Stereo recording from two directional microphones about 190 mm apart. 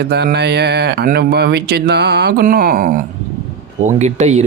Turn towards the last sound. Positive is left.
turn(degrees=-35)  # may be behind; listen again after turning